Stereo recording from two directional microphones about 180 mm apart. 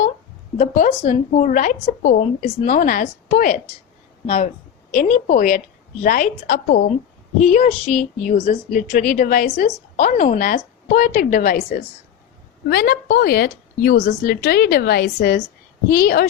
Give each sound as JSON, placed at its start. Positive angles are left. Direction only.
{"t": 0.5, "sound": "a woman's voice", "side_deg": 45}